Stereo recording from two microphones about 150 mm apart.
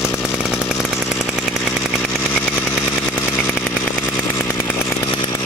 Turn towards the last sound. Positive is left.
turn(degrees=35)  # may be behind; listen again after turning